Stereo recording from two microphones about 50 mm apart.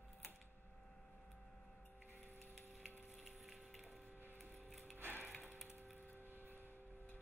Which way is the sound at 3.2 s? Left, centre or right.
Centre.